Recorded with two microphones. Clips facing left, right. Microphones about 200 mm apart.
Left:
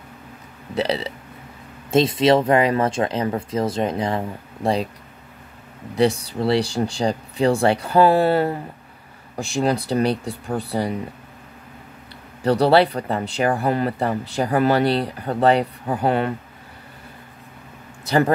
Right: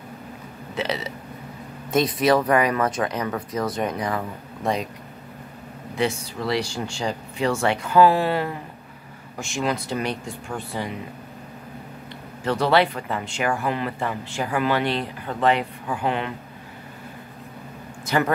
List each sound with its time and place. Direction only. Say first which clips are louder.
0.7 s speech: left 5 dB; 30° left (ahead or behind)
5.9 s speech: left 6 dB; 35° left (ahead or behind)
12.4 s speech: left 4 dB; 35° left (ahead or behind)
18.0 s speech: left 4 dB; 35° left (ahead or behind)